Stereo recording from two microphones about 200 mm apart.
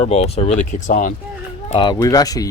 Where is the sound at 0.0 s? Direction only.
30° left (ahead or behind).